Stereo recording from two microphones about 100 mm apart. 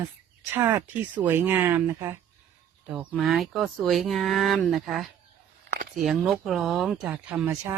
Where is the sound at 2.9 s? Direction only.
5° right (ahead or behind).